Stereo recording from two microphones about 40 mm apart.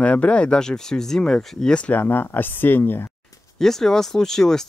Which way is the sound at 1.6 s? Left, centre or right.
Left.